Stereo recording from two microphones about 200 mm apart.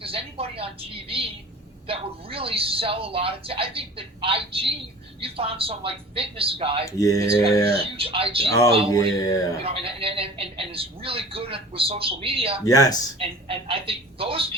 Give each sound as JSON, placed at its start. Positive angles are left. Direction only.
{"t": 0.0, "sound": "a woman's voice", "side_deg": -30}
{"t": 6.8, "sound": "speech", "side_deg": 15}
{"t": 7.2, "sound": "a man's voice", "side_deg": -30}
{"t": 8.4, "sound": "speech", "side_deg": 15}
{"t": 9.6, "sound": "a man's voice", "side_deg": -30}
{"t": 12.6, "sound": "speech", "side_deg": 15}
{"t": 13.1, "sound": "a man's voice", "side_deg": -30}